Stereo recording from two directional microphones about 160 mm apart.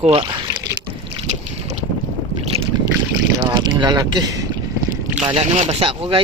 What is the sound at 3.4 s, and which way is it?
Boat, 25° right (ahead or behind).